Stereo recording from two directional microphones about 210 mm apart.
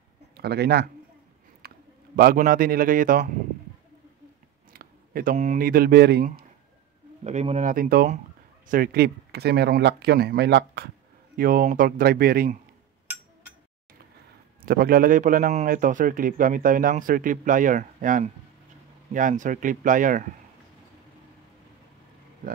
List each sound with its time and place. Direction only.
0.4 s speech: 50° right (ahead or behind)
1.6 s a sound: 45° right (ahead or behind)
2.1 s speech: 45° right (ahead or behind)
4.7 s speech: 40° right (ahead or behind)
7.2 s a man's voice: 35° right (ahead or behind)
14.6 s a man's voice: 45° right (ahead or behind)